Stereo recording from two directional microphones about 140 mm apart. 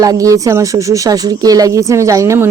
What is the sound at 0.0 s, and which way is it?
Speech, 25° right (ahead or behind).